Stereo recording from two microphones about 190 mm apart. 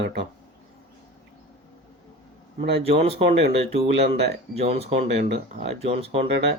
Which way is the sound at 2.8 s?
30° right (ahead or behind).